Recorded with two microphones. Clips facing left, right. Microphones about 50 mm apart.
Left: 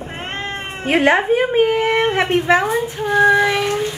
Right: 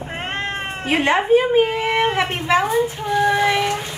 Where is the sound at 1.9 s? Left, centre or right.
Centre.